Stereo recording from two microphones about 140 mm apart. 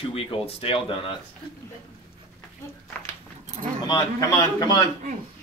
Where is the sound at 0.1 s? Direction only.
45° left (ahead or behind).